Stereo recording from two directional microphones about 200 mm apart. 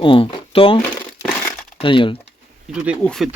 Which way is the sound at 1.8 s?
25° left (ahead or behind).